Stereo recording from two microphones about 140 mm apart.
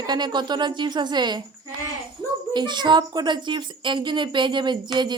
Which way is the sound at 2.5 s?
35° right (ahead or behind).